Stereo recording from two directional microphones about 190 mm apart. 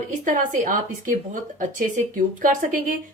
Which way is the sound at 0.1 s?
45° right (ahead or behind).